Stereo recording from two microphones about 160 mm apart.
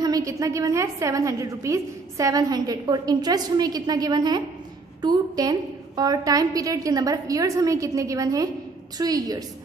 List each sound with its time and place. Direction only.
0.0 s a woman's voice: 20° right (ahead or behind)